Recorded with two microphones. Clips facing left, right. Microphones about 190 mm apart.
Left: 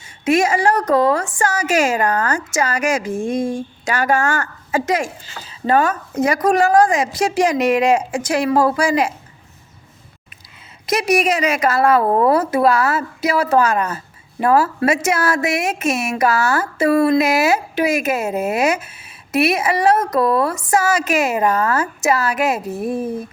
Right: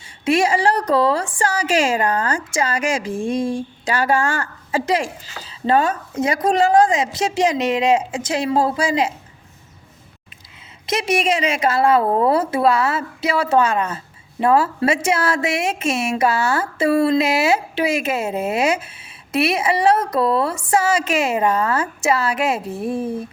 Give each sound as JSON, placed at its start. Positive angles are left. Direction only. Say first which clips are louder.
{"t": 0.3, "sound": "a woman's voice", "louder": "left 1 dB", "side_deg": -30}
{"t": 10.8, "sound": "a woman's voice", "louder": "left 3 dB", "side_deg": -25}